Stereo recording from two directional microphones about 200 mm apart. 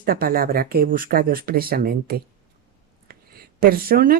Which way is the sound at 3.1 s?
50° right (ahead or behind).